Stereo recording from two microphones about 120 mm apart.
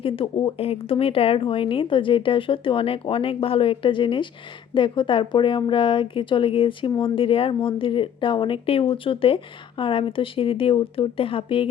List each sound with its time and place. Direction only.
0.0 s speech: 45° left (ahead or behind)